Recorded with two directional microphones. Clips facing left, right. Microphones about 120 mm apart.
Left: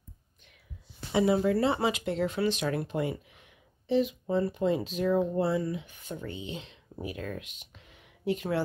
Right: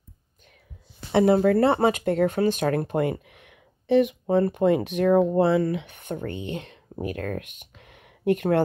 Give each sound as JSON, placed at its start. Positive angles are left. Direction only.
{"t": 1.1, "sound": "speech", "side_deg": -60}